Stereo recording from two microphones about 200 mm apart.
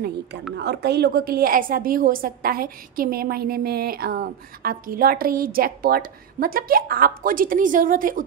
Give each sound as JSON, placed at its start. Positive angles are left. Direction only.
{"t": 0.6, "sound": "a woman's voice", "side_deg": -55}